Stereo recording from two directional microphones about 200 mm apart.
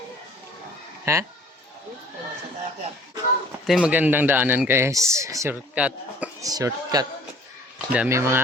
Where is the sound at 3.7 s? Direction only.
5° right (ahead or behind).